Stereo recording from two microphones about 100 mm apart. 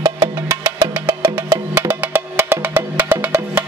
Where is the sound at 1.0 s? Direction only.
20° right (ahead or behind).